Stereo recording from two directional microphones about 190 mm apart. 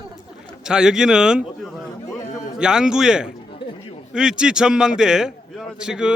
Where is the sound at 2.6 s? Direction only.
5° right (ahead or behind).